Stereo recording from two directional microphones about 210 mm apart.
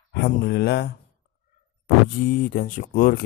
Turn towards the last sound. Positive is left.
turn(degrees=45)  # may be behind; listen again after turning